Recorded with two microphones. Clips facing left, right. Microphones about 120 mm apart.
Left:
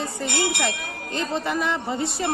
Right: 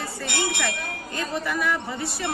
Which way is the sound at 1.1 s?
25° left (ahead or behind).